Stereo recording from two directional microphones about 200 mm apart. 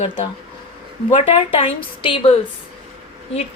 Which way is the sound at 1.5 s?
25° left (ahead or behind).